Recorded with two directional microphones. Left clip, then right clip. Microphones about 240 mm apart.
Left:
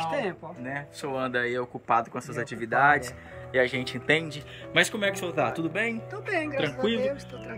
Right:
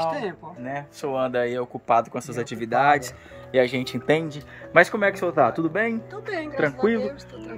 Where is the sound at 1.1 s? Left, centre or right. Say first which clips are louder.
Right 4 dB; right.